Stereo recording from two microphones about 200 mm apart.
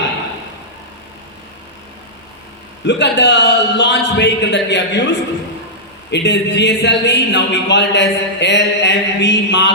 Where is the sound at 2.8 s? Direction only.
60° left (ahead or behind).